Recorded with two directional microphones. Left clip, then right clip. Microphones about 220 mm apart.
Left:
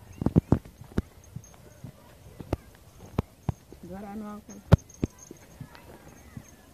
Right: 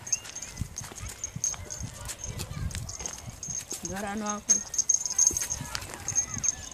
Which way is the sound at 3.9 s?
30° right (ahead or behind).